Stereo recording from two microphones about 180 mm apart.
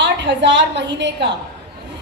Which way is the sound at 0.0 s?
80° right.